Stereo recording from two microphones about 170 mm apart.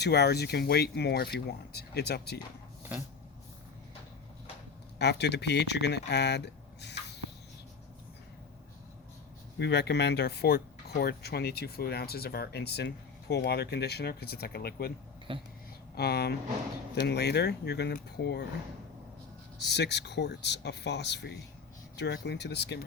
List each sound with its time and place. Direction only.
0.0 s speech: 75° left (ahead or behind)
4.9 s speech: 85° left
9.6 s speech: 85° left; by 14.9 s 65° left (ahead or behind)
15.3 s a sound: 30° right (ahead or behind)
16.0 s speech: 70° left (ahead or behind)
19.6 s speech: 80° left